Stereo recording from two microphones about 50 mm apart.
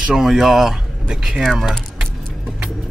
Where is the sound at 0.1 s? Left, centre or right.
Centre.